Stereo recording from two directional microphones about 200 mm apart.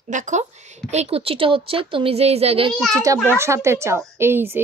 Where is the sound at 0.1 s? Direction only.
35° right (ahead or behind).